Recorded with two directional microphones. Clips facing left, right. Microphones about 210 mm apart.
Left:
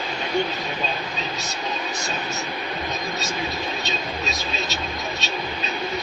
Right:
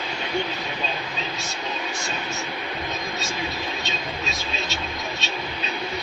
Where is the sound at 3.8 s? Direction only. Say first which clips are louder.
Left 2 dB; 40° left (ahead or behind).